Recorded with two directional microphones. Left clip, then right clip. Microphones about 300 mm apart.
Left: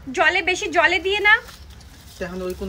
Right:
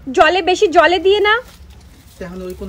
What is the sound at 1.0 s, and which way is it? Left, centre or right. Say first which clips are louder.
A woman's voice: right 4 dB; centre.